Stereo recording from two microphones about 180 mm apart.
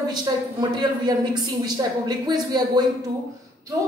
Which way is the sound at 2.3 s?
25° right (ahead or behind).